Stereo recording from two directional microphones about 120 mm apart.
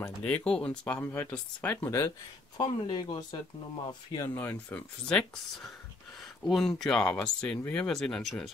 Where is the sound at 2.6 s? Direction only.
40° left (ahead or behind).